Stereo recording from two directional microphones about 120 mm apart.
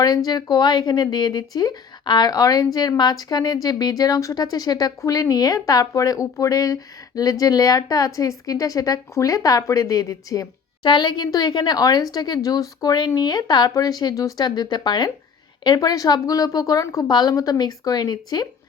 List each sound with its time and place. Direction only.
0.3 s a woman's voice: 30° left (ahead or behind)